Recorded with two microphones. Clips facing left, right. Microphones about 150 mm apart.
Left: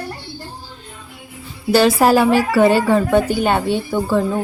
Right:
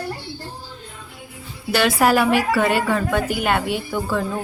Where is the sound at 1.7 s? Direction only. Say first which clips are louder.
Left 4 dB; 30° left (ahead or behind).